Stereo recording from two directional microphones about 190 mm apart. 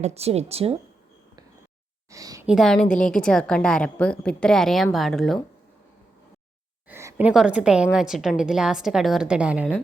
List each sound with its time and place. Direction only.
0.0 s speech: 35° right (ahead or behind)
2.0 s a sound: 15° right (ahead or behind)
2.5 s a woman's voice: centre (ahead or behind)
6.8 s a woman's voice: 10° right (ahead or behind)